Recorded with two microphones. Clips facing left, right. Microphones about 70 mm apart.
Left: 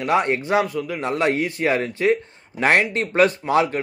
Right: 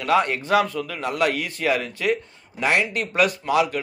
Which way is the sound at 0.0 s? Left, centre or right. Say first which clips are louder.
Left 1 dB; left.